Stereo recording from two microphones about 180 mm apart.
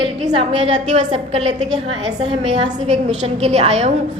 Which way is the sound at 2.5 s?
35° right (ahead or behind).